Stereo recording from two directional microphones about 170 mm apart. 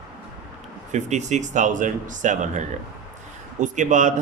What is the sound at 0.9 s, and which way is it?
A man's voice, 45° right (ahead or behind).